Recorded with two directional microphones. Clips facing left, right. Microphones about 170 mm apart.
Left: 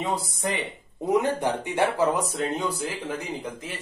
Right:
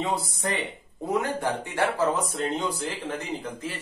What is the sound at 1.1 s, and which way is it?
Speech, 20° left (ahead or behind).